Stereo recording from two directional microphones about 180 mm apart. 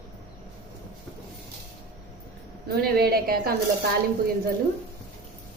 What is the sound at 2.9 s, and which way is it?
Speech, 60° right (ahead or behind).